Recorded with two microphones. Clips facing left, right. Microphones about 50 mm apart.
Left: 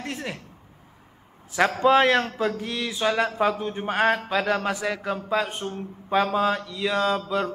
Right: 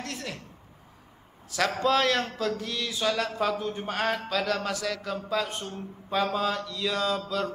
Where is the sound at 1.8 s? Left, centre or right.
Left.